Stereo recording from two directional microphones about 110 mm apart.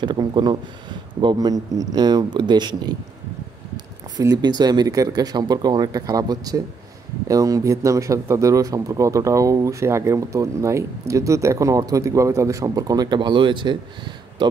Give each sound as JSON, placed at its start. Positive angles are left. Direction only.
{"t": 0.0, "sound": "speech", "side_deg": -45}
{"t": 4.2, "sound": "a man's voice", "side_deg": -35}